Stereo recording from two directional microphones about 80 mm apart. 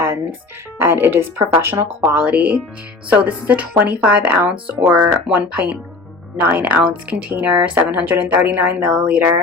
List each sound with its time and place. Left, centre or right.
0.8 s speech: right
2.1 s speech: centre